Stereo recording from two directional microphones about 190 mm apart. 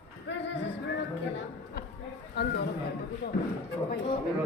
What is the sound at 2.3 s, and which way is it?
Chatter, 60° left (ahead or behind).